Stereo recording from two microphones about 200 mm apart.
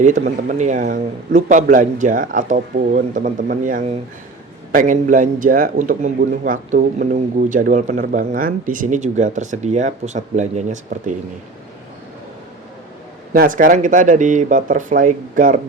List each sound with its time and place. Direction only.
0.0 s a man's voice: 40° right (ahead or behind)
13.3 s a man's voice: 45° right (ahead or behind)